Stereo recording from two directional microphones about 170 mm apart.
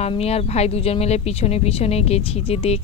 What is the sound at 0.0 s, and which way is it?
Speech, 40° left (ahead or behind).